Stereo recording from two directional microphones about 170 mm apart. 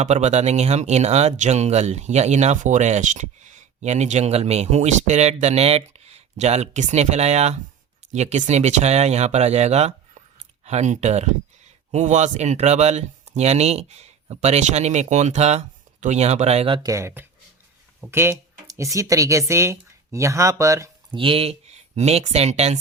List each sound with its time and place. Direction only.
0.0 s speech: 40° right (ahead or behind); by 20.9 s 15° right (ahead or behind)
21.1 s speech: 30° right (ahead or behind)